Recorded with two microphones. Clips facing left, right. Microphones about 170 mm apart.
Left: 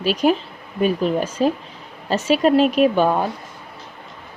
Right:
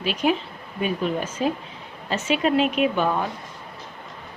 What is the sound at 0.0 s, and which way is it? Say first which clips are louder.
A woman's voice: left 5 dB; 40° left (ahead or behind).